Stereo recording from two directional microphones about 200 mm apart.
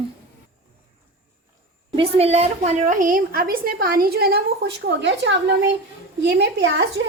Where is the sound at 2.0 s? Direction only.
30° right (ahead or behind); by 6.8 s 60° right (ahead or behind).